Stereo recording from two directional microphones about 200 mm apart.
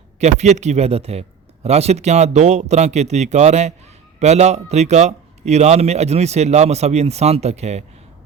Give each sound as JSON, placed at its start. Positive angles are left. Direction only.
{"t": 0.2, "sound": "a man's voice", "side_deg": -35}